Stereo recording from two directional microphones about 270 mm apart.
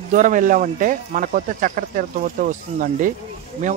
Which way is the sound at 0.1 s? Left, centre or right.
Right.